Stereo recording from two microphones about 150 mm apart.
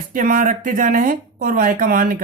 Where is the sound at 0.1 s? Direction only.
65° right (ahead or behind).